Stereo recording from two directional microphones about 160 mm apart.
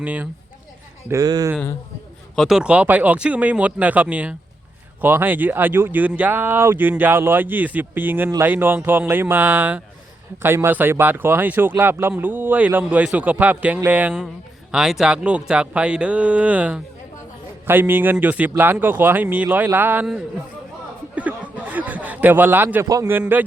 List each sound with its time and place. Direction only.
0.0 s speech: 10° right (ahead or behind)
1.0 s speech: 20° right (ahead or behind)
2.3 s speech: centre (ahead or behind)
21.2 s speech: 10° right (ahead or behind)